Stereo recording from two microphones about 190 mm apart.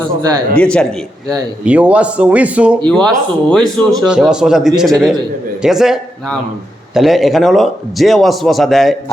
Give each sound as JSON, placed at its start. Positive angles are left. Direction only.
{"t": 0.5, "sound": "a man's voice", "side_deg": 5}
{"t": 1.6, "sound": "a man's voice", "side_deg": -5}